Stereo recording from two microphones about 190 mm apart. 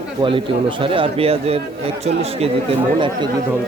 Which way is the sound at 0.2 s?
25° right (ahead or behind).